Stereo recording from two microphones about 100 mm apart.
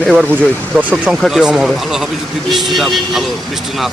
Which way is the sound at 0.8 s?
15° right (ahead or behind).